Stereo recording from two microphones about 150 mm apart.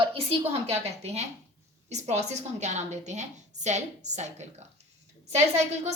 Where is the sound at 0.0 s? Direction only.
40° right (ahead or behind).